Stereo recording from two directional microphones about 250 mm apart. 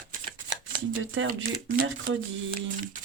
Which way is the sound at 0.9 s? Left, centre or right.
Right.